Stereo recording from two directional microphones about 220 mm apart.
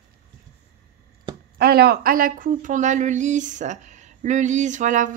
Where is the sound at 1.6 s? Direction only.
45° right (ahead or behind).